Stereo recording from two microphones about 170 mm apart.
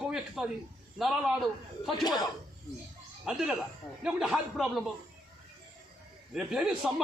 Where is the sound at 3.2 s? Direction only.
5° right (ahead or behind).